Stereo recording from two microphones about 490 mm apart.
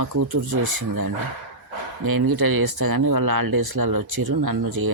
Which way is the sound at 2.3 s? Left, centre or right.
Right.